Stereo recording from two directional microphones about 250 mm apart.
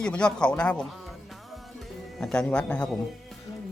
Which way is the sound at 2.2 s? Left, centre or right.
Centre.